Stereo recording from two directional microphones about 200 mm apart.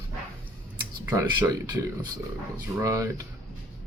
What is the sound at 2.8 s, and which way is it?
Speech, 15° right (ahead or behind).